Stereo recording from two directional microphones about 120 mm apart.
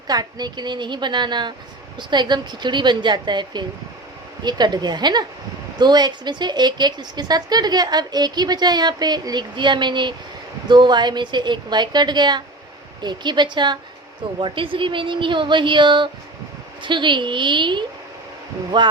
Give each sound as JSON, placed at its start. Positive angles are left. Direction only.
{"t": 0.1, "sound": "speech", "side_deg": -35}